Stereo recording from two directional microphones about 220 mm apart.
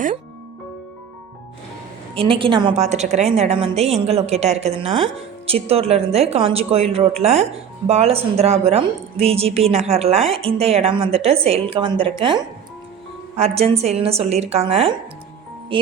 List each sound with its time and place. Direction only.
2.1 s a woman's voice: 25° right (ahead or behind)